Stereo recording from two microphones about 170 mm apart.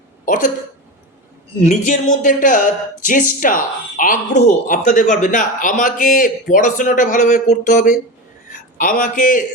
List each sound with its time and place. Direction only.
0.3 s a man's voice: 50° left (ahead or behind)
1.6 s a man's voice: 50° left (ahead or behind)